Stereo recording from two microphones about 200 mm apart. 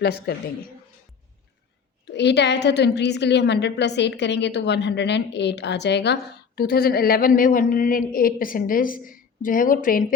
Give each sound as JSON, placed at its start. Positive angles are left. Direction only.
{"t": 0.0, "sound": "a woman's voice", "side_deg": 55}
{"t": 2.1, "sound": "a woman's voice", "side_deg": 60}